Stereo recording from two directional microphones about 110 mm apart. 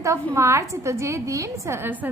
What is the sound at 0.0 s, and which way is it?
A woman's voice, 25° right (ahead or behind).